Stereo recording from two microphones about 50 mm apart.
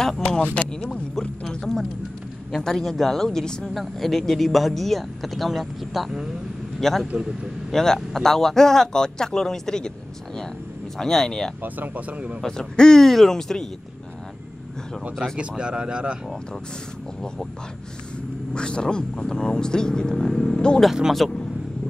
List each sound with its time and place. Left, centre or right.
0.6 s a man's voice: centre
3.7 s a man's voice: centre
7.2 s a man's voice: centre
7.7 s a man's voice: centre
11.6 s speech: right
12.4 s a man's voice: centre
15.3 s speech: centre
18.5 s a man's voice: centre
21.2 s speech: centre